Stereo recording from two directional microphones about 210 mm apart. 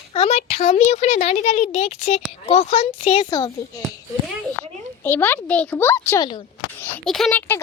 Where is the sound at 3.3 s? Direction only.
20° left (ahead or behind).